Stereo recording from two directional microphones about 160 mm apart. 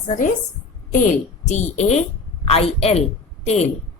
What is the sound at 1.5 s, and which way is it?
A woman's voice, 45° left (ahead or behind).